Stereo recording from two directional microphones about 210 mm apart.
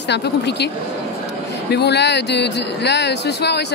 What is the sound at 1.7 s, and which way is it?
Speech, 50° left (ahead or behind).